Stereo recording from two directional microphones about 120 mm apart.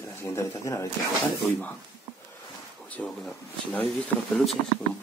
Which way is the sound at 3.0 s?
15° left (ahead or behind).